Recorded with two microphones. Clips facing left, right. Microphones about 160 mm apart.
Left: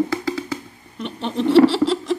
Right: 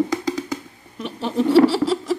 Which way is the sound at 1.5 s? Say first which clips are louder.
Left 2 dB; 5° right (ahead or behind).